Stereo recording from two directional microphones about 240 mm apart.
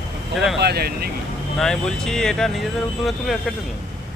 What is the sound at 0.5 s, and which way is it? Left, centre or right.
Vehicle, right.